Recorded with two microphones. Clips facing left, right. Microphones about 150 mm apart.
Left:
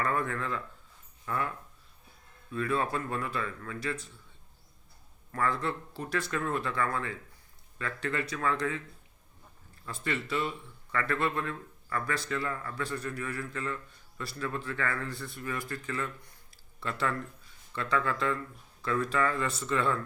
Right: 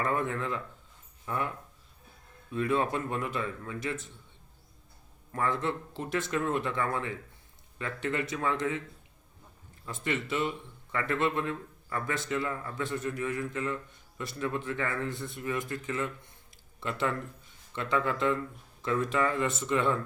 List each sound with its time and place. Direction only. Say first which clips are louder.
0.0 s speech: right 1 dB; 20° right (ahead or behind)
5.3 s speech: right 1 dB; 20° right (ahead or behind)
9.8 s speech: right 2 dB; 20° right (ahead or behind)